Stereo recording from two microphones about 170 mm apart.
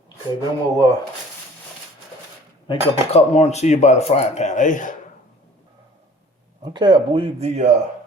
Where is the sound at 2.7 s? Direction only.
40° left (ahead or behind).